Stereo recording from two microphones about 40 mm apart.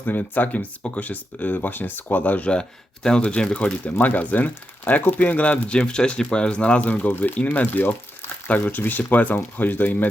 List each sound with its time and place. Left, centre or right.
0.0 s speech: left
2.5 s speech: left
3.8 s speech: left
5.7 s speech: left
6.8 s speech: left